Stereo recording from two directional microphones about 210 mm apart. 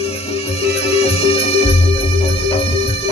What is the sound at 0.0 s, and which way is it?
Music, 30° left (ahead or behind).